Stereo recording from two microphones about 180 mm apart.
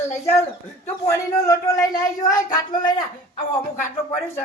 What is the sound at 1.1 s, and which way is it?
Speech, 15° left (ahead or behind).